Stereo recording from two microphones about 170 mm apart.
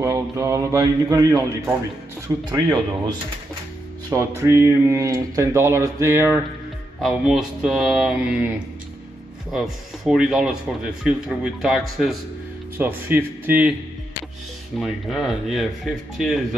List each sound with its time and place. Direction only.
0.0 s a man's voice: 20° right (ahead or behind)
7.0 s speech: centre (ahead or behind)
10.0 s speech: centre (ahead or behind)
12.7 s speech: 10° right (ahead or behind)
14.8 s speech: centre (ahead or behind)